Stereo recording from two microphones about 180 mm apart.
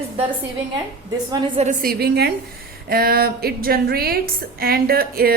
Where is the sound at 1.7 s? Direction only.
60° right (ahead or behind).